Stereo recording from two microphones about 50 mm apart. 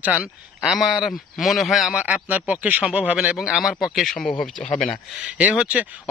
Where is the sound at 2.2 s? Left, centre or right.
Right.